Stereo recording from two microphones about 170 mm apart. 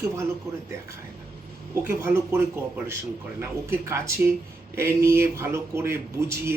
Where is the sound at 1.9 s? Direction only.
15° right (ahead or behind).